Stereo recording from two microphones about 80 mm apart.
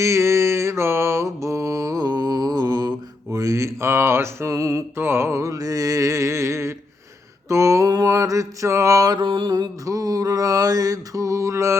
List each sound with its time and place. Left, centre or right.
0.0 s mantra: right
3.3 s mantra: right
9.2 s mantra: right
9.8 s mantra: right